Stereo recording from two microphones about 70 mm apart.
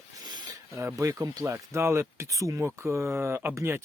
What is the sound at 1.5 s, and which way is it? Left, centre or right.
Speech, right.